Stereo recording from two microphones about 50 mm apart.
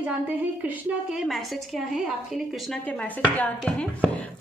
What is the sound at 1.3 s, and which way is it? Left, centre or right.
A woman's voice, centre.